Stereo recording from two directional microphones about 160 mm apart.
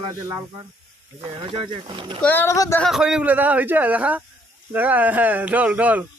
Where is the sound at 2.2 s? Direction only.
10° left (ahead or behind).